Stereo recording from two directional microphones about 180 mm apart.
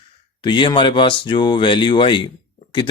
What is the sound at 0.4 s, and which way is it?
Speech, 25° left (ahead or behind).